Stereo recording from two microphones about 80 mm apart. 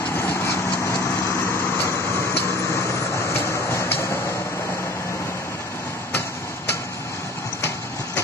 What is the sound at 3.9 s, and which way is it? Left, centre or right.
Vehicle, left.